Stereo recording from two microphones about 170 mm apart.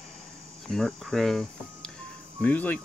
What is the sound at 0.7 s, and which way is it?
Speech, centre (ahead or behind).